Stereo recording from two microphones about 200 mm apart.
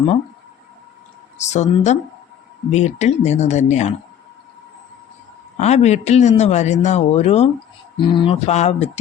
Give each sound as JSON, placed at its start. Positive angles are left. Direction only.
{"t": 1.5, "sound": "a man's voice", "side_deg": 35}
{"t": 5.5, "sound": "a man's voice", "side_deg": 35}